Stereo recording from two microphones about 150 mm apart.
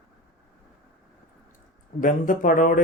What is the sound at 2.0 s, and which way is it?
Speech, 60° left (ahead or behind).